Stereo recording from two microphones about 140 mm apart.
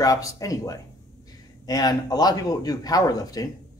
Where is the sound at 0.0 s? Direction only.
25° left (ahead or behind).